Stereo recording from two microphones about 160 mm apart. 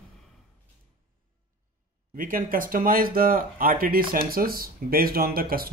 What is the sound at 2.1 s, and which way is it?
Speech, 60° right (ahead or behind).